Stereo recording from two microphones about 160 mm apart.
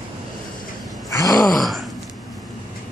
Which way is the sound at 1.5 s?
Centre (ahead or behind).